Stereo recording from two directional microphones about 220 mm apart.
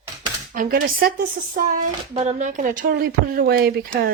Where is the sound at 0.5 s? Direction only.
40° right (ahead or behind).